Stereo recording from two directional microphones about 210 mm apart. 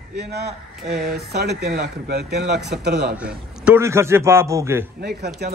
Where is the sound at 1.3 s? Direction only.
50° right (ahead or behind).